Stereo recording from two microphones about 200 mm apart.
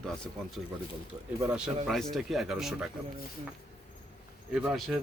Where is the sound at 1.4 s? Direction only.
5° right (ahead or behind).